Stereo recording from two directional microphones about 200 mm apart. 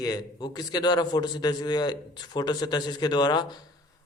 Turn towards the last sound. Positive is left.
turn(degrees=20)  # may be behind; listen again after turning